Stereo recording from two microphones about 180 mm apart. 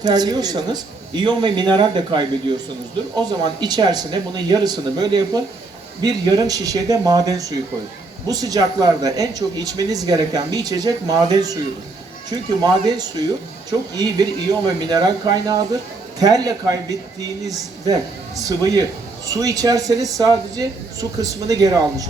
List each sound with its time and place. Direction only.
0.0 s speech: 20° right (ahead or behind)